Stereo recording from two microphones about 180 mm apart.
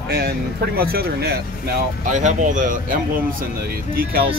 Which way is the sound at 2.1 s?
45° right (ahead or behind).